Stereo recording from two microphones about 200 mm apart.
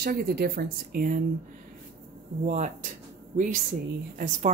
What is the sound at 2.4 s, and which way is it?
A woman's voice, 40° right (ahead or behind).